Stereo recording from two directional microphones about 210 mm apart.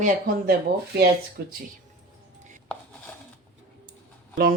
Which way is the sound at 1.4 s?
45° right (ahead or behind).